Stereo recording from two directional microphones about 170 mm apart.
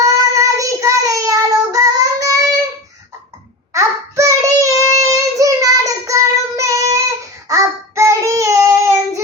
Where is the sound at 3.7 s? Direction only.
15° right (ahead or behind).